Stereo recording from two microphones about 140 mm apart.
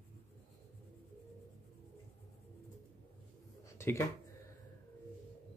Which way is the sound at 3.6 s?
20° left (ahead or behind).